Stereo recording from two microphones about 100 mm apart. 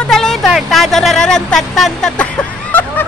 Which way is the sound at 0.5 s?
Centre (ahead or behind).